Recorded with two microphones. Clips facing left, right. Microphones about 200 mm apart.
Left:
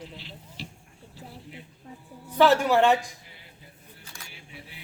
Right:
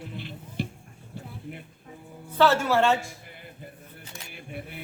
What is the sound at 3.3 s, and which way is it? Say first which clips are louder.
Music: right 8 dB; 55° right (ahead or behind).